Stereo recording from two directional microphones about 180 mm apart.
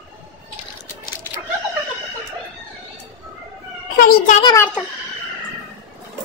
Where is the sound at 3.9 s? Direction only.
55° left (ahead or behind).